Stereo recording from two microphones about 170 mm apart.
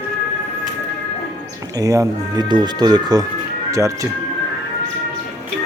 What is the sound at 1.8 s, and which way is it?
Speech, 20° right (ahead or behind).